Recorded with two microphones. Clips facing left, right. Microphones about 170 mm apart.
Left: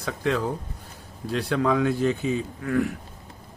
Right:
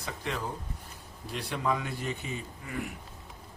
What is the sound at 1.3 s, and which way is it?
Speech, 90° left.